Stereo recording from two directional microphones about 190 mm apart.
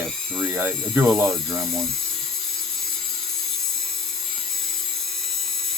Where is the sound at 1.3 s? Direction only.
Centre (ahead or behind).